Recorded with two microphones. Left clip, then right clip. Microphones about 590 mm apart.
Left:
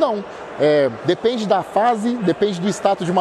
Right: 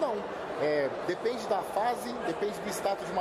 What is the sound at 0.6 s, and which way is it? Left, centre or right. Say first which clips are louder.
Speech: left 14 dB; left.